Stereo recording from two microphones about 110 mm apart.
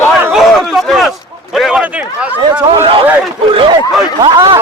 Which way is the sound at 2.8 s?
55° right (ahead or behind).